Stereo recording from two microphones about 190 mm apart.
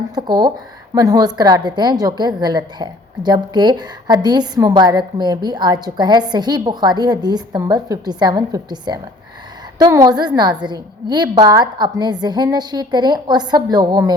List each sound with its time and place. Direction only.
0.1 s a woman's voice: 20° right (ahead or behind)